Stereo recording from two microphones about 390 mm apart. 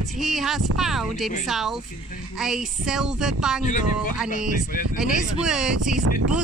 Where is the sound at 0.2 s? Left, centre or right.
Centre.